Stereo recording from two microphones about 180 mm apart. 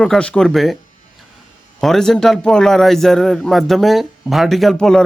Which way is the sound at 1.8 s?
Centre (ahead or behind).